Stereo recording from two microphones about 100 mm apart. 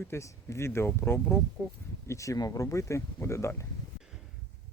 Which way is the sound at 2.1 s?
30° left (ahead or behind).